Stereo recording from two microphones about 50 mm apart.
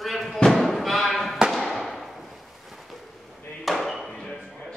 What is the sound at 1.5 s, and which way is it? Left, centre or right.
Fireworks, centre.